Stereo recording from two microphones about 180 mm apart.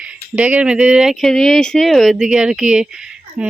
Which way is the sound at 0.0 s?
5° right (ahead or behind).